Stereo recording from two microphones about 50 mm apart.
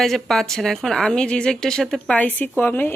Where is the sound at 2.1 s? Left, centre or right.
Left.